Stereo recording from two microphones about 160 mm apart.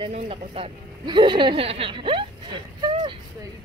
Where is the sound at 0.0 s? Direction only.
35° right (ahead or behind).